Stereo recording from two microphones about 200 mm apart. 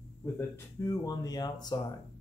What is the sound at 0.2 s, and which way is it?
Speech, 15° left (ahead or behind).